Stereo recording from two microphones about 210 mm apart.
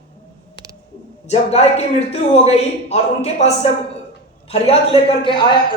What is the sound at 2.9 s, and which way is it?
A woman's voice, 30° left (ahead or behind).